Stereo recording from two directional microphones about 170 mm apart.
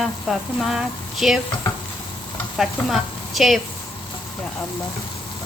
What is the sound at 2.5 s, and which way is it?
Speech, centre (ahead or behind).